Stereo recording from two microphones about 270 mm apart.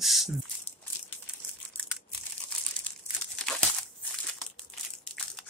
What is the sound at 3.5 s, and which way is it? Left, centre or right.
Crumpling, centre.